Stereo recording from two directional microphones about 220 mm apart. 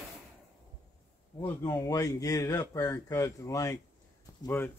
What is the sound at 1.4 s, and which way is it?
Speech, 10° left (ahead or behind).